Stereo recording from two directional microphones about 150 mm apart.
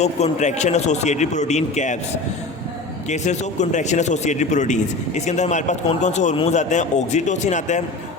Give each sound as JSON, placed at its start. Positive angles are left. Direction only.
{"t": 0.0, "sound": "speech", "side_deg": 50}
{"t": 3.1, "sound": "speech", "side_deg": 50}